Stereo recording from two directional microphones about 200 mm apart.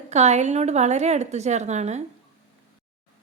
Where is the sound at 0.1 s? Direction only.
35° right (ahead or behind).